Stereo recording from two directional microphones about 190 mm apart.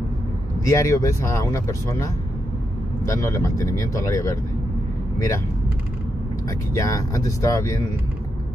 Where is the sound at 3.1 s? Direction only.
15° left (ahead or behind).